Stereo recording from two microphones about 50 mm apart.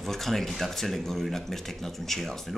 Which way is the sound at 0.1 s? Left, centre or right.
Centre.